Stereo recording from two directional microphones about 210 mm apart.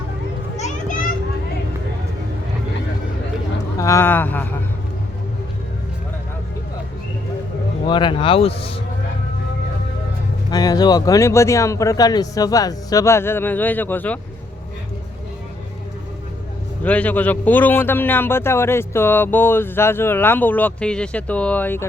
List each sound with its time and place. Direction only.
0.5 s children playing: 35° left (ahead or behind)
3.8 s speech: 15° left (ahead or behind)
7.9 s speech: 20° left (ahead or behind)
10.5 s speech: 20° left (ahead or behind)
16.8 s speech: 5° left (ahead or behind)